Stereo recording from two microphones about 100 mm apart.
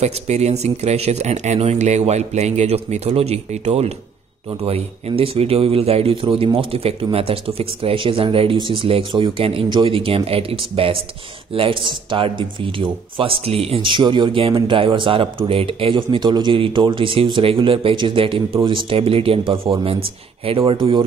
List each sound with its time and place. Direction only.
0.0 s speech: 90° right
6.2 s a man's voice: 65° right (ahead or behind)